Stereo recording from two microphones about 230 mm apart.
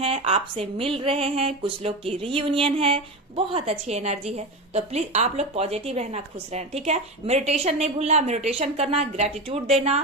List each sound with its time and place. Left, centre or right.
0.0 s a woman's voice: right